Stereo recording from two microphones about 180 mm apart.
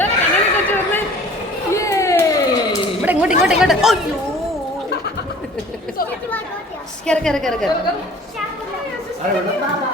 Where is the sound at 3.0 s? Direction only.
5° right (ahead or behind).